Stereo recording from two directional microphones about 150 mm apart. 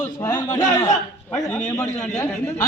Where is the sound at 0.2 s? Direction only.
25° left (ahead or behind).